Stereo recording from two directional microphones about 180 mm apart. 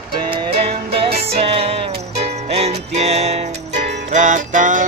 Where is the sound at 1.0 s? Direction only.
30° right (ahead or behind).